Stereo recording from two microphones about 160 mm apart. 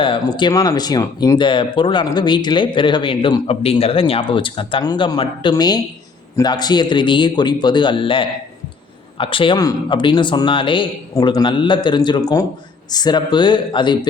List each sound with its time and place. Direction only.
0.0 s speech: 30° left (ahead or behind)